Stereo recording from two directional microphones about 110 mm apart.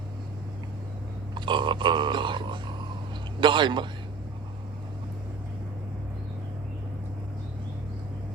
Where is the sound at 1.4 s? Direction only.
45° right (ahead or behind).